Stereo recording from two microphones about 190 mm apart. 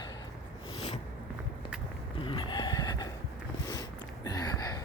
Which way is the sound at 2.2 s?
25° left (ahead or behind).